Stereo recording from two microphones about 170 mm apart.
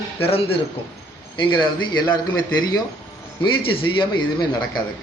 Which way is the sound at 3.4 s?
30° left (ahead or behind).